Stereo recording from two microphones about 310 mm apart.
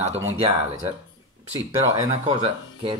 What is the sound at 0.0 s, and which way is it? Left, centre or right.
Speech, centre.